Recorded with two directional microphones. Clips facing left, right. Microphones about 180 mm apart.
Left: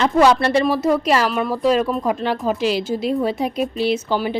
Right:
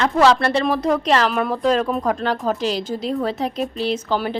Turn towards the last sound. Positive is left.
turn(degrees=5)  # may be behind; listen again after turning